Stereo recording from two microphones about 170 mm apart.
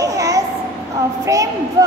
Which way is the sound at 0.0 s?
20° right (ahead or behind).